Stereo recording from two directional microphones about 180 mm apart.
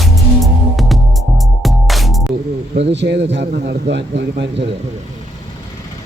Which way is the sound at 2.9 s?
80° right.